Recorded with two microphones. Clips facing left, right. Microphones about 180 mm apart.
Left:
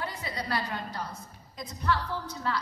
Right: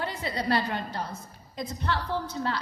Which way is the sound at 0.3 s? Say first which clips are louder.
Right 6 dB; 25° right (ahead or behind).